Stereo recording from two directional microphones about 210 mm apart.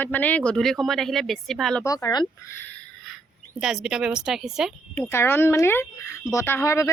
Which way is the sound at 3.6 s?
5° right (ahead or behind).